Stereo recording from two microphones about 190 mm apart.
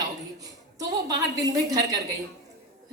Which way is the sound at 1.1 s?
20° right (ahead or behind).